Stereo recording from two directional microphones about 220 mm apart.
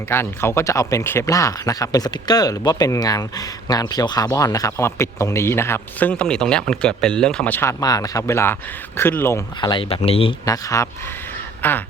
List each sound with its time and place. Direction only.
0.1 s speech: 10° left (ahead or behind)